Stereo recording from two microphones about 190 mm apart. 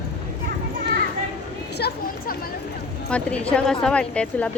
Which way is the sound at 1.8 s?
55° left (ahead or behind).